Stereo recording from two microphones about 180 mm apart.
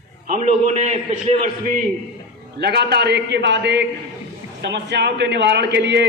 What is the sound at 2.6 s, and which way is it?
A man's voice, 65° right (ahead or behind).